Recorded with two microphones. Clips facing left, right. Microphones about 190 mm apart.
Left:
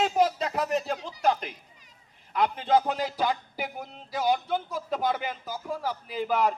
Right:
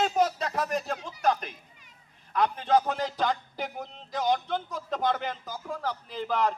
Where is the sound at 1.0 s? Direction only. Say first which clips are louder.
Left 1 dB; 30° left (ahead or behind).